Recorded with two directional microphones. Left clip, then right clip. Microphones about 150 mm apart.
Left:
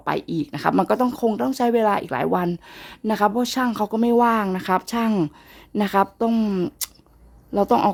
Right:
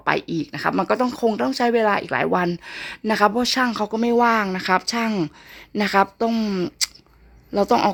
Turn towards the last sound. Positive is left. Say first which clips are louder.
# even
turn(degrees=10)  # may be behind; listen again after turning